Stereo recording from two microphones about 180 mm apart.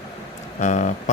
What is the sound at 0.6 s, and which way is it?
Speech, 45° left (ahead or behind).